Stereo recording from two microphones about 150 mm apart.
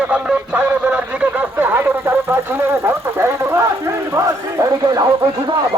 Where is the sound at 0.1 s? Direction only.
10° right (ahead or behind).